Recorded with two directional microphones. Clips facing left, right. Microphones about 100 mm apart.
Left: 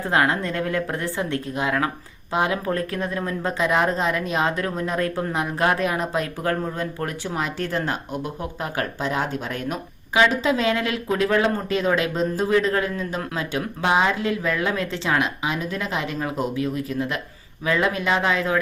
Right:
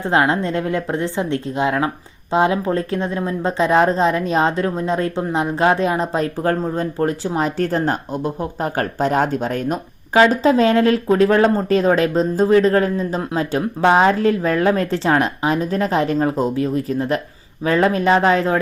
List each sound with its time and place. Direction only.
0.0 s speech: 25° right (ahead or behind)